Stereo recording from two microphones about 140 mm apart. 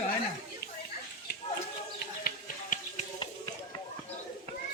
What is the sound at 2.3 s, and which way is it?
Finger snapping, 70° left (ahead or behind).